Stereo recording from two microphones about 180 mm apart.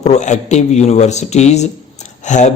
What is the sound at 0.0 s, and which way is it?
A man's voice, 40° left (ahead or behind).